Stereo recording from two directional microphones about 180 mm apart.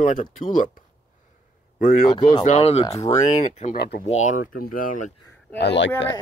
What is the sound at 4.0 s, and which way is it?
Speech, 40° left (ahead or behind).